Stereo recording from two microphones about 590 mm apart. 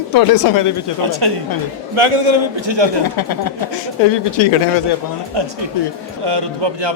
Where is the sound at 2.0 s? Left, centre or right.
Right.